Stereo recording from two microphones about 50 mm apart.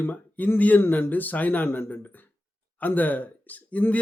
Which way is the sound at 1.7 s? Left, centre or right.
Left.